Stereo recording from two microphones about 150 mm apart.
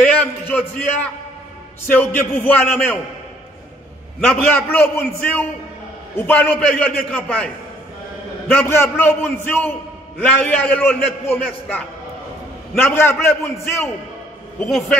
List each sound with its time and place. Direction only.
0.0 s a man's voice: 10° left (ahead or behind)
4.3 s a man's voice: 15° left (ahead or behind)
6.1 s a man's voice: 15° left (ahead or behind)
14.6 s a man's voice: centre (ahead or behind)